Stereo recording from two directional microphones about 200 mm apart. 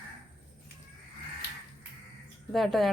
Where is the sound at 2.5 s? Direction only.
Centre (ahead or behind).